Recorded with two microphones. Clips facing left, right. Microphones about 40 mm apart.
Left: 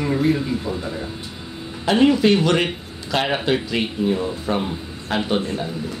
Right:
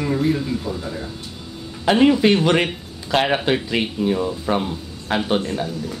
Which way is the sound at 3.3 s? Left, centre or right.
Right.